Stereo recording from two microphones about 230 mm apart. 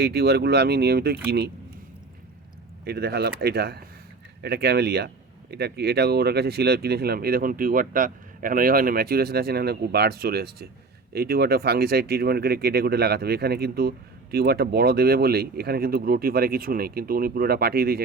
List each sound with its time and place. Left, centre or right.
0.0 s speech: right
2.8 s speech: right